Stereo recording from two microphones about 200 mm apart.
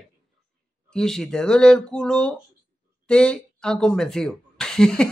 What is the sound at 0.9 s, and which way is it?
Speech, centre (ahead or behind).